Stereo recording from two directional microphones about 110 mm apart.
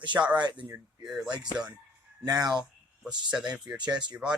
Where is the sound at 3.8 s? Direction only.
40° right (ahead or behind).